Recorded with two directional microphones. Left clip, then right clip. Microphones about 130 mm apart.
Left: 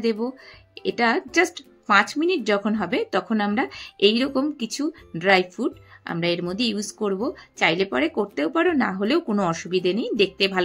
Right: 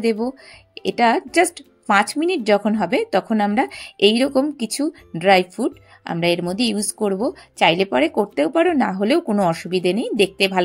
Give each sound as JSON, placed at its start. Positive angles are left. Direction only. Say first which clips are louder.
{"t": 0.0, "sound": "a woman's voice", "louder": "right 4 dB", "side_deg": -40}